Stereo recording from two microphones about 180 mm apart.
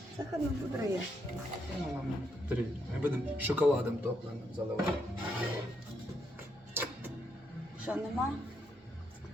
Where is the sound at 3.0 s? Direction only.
10° right (ahead or behind).